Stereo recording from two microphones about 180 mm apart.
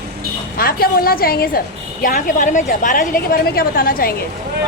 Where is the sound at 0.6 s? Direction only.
55° left (ahead or behind).